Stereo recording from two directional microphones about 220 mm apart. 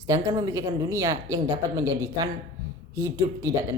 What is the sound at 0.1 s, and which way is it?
A woman's voice, 15° right (ahead or behind).